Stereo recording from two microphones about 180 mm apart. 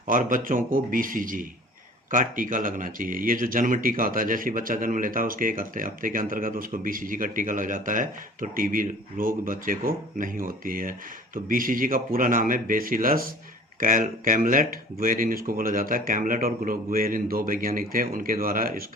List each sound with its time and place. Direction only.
0.1 s speech: 50° right (ahead or behind)